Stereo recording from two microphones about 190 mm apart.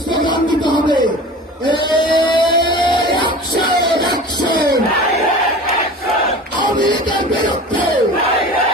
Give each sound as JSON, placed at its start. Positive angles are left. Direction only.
{"t": 0.1, "sound": "music", "side_deg": 25}
{"t": 4.0, "sound": "crowd", "side_deg": 20}
{"t": 6.8, "sound": "a sound", "side_deg": 25}